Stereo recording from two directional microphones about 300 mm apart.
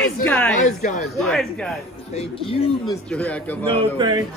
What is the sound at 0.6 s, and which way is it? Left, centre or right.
Speech, left.